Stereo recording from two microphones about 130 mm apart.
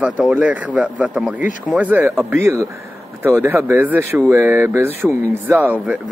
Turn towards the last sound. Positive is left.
turn(degrees=-10)  # may be behind; listen again after turning